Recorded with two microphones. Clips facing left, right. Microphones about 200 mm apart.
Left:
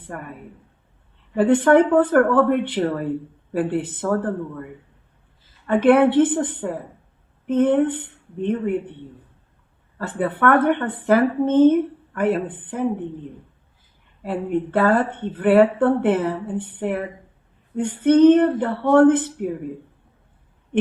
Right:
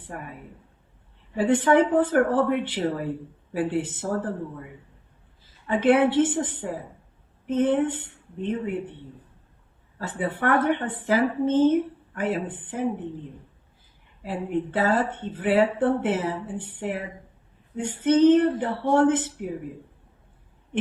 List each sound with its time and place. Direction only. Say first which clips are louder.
1.4 s speech: left 5 dB; 60° left (ahead or behind)
5.6 s speech: left 5 dB; 60° left (ahead or behind)
10.0 s speech: left 6 dB; 55° left (ahead or behind)
14.2 s speech: left 4 dB; 55° left (ahead or behind)